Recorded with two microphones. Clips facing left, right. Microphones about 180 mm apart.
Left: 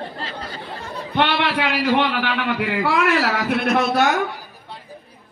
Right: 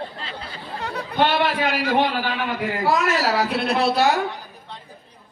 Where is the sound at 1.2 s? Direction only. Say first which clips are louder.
Right 1 dB; 45° right (ahead or behind).